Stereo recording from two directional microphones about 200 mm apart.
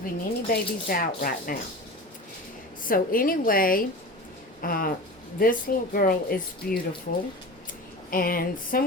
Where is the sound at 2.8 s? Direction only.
45° left (ahead or behind).